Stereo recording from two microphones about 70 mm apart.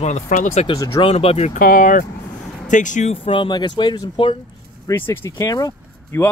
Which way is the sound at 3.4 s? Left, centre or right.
Left.